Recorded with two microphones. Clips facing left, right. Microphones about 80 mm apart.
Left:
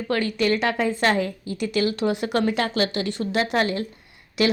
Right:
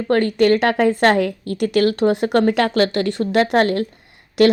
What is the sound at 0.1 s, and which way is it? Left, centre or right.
A woman's voice, right.